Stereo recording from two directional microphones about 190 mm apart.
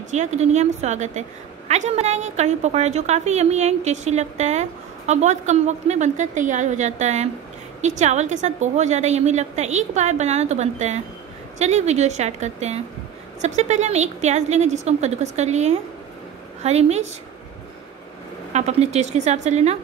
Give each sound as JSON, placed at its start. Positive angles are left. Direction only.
{"t": 0.1, "sound": "a woman's voice", "side_deg": -35}
{"t": 18.5, "sound": "a woman's voice", "side_deg": -35}